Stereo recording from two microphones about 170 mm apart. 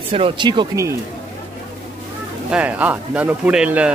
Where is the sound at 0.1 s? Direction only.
30° right (ahead or behind).